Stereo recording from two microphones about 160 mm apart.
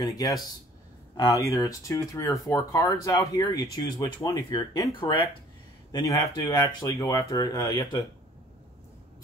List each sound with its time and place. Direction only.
0.0 s speech: 25° left (ahead or behind)
5.9 s speech: 20° left (ahead or behind)